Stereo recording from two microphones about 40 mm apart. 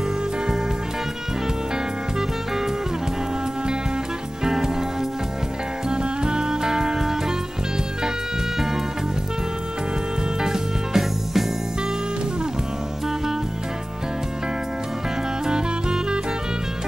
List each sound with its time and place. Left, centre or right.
2.1 s music: centre
4.4 s music: centre
5.9 s music: centre
10.4 s music: centre
15.4 s music: centre